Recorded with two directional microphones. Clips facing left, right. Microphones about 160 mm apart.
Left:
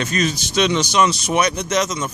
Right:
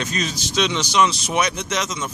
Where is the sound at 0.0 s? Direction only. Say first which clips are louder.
Left 5 dB; 55° left (ahead or behind).